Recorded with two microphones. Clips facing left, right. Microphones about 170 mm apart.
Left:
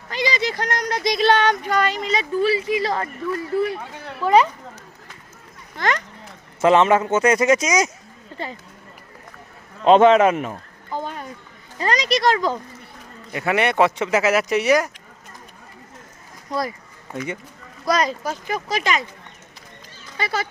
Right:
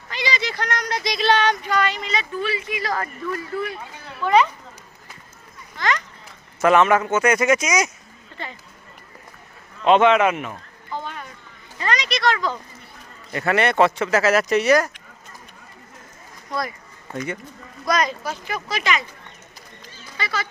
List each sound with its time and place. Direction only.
0.1 s speech: 45° left (ahead or behind); by 3.1 s 25° left (ahead or behind)
4.2 s speech: 35° left (ahead or behind)
5.7 s a sound: 55° left (ahead or behind)
6.6 s speech: 25° left (ahead or behind)
8.3 s a sound: 40° left (ahead or behind)
9.8 s speech: 35° left (ahead or behind)
13.3 s speech: 10° left (ahead or behind)
17.8 s speech: 30° left (ahead or behind)
18.3 s speech: 40° left (ahead or behind)
20.1 s speech: 50° left (ahead or behind)